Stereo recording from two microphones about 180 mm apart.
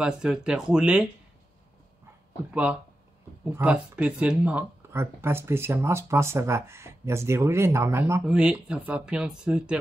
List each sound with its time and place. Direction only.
0.0 s speech: 5° right (ahead or behind)
2.5 s speech: 5° right (ahead or behind)